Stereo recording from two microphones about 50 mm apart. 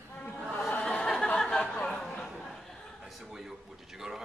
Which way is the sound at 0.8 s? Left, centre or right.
Centre.